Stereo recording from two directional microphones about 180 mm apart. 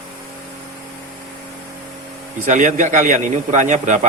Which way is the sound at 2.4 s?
45° right (ahead or behind).